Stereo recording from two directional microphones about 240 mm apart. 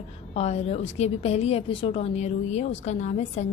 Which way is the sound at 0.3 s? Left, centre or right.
Left.